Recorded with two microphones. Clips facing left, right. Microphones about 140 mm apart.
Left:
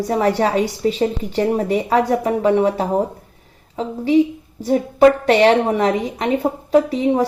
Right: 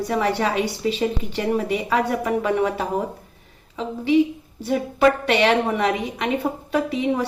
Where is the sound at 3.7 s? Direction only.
40° left (ahead or behind).